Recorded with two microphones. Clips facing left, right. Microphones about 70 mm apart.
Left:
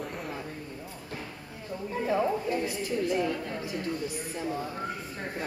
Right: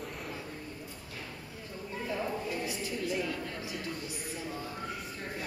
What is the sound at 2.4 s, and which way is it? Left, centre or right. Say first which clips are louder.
Speech: left 6 dB; left.